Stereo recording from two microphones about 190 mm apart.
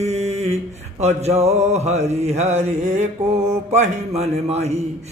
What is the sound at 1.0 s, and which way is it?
Speech, 35° right (ahead or behind).